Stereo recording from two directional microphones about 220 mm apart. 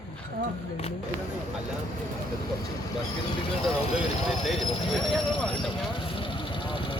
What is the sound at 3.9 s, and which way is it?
Vehicle, centre (ahead or behind).